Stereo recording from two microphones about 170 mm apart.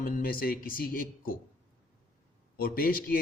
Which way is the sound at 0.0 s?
55° left (ahead or behind).